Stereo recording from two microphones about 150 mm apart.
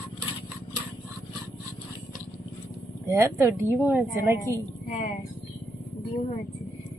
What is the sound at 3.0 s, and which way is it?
A woman's voice, 20° right (ahead or behind).